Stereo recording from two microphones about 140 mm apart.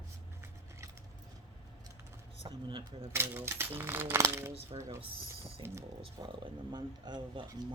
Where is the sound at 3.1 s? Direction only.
15° right (ahead or behind).